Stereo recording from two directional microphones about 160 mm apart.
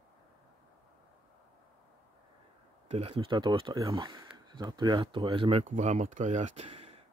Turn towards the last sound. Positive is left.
turn(degrees=-35)  # may be behind; listen again after turning